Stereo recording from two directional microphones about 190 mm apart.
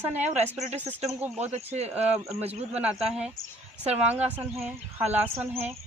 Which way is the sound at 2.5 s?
10° right (ahead or behind).